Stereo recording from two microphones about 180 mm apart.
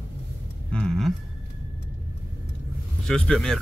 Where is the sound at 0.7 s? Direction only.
Centre (ahead or behind).